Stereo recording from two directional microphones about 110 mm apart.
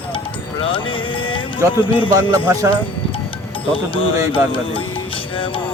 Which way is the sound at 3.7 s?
50° left (ahead or behind).